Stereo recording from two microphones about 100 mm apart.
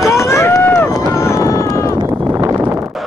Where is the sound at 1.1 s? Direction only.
30° left (ahead or behind).